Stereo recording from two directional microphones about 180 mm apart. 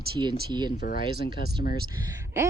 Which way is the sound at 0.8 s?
50° left (ahead or behind).